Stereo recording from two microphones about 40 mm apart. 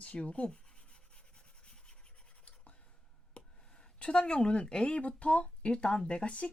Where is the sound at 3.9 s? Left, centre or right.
Left.